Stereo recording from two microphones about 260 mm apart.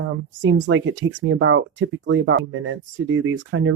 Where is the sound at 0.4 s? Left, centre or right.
Right.